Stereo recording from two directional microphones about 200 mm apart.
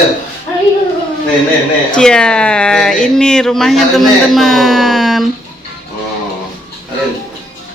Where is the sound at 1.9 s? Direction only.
5° left (ahead or behind).